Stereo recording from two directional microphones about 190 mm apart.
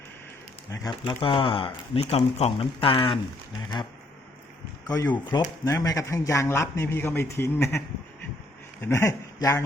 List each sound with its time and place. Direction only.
0.7 s speech: 25° left (ahead or behind)
4.9 s speech: 15° left (ahead or behind)
8.8 s speech: 15° left (ahead or behind)